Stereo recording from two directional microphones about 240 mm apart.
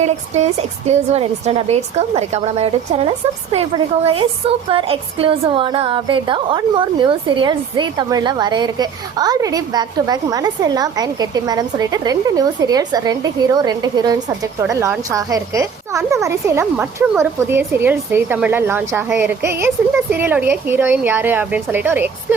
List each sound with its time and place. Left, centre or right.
0.9 s a woman's voice: right; by 22.4 s centre